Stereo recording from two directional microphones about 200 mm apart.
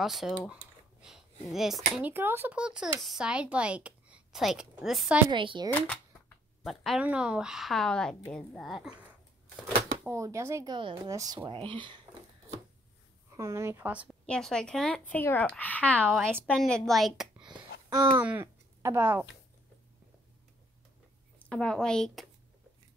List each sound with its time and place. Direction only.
0.0 s speech: centre (ahead or behind)
5.3 s speech: 25° right (ahead or behind)
5.7 s speech: 10° left (ahead or behind)
10.0 s speech: 15° right (ahead or behind)
13.4 s a woman's voice: 15° right (ahead or behind)
14.2 s speech: 5° left (ahead or behind)
17.8 s speech: 20° right (ahead or behind)
21.5 s speech: 5° left (ahead or behind)